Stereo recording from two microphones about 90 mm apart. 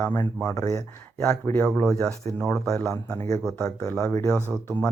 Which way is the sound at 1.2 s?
15° left (ahead or behind).